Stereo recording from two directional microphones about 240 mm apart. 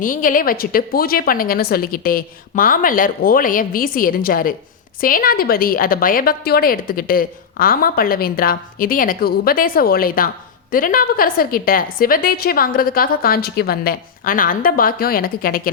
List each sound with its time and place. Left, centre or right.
0.0 s a woman's voice: left